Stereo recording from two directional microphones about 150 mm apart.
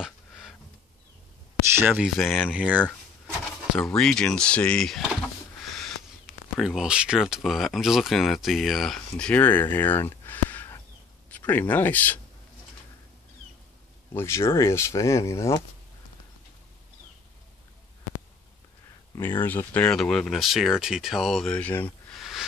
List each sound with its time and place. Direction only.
0.0 s a sound: centre (ahead or behind)
1.8 s speech: 15° right (ahead or behind)
2.0 s speech: centre (ahead or behind)
3.7 s speech: 5° left (ahead or behind)
14.1 s speech: 15° left (ahead or behind)
19.4 s speech: 10° left (ahead or behind)
22.2 s a sound: centre (ahead or behind)